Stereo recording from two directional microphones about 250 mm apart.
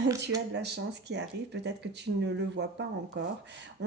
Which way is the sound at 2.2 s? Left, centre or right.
Right.